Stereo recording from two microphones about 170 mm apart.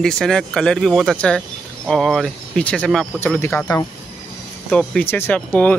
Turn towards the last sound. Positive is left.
turn(degrees=10)  # may be behind; listen again after turning